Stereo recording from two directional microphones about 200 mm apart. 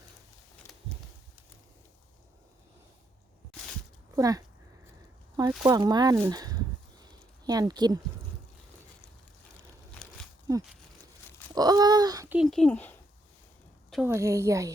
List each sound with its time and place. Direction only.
4.1 s a woman's voice: 15° right (ahead or behind)
5.6 s speech: 20° right (ahead or behind)
7.0 s a sound: 20° right (ahead or behind)
10.5 s speech: 15° right (ahead or behind)
12.4 s speech: centre (ahead or behind)
13.9 s a woman's voice: 10° right (ahead or behind)